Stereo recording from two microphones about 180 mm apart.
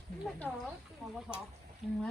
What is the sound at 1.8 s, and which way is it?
Speech, centre (ahead or behind).